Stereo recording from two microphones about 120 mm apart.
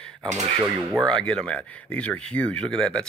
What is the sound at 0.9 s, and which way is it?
Speech, 5° left (ahead or behind).